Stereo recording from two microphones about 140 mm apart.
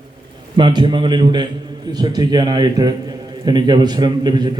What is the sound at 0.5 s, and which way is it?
A man's voice, 35° right (ahead or behind).